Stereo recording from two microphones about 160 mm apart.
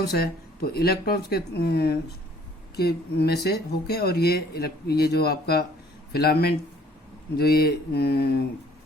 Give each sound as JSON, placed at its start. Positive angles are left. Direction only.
{"t": 0.0, "sound": "speech", "side_deg": 75}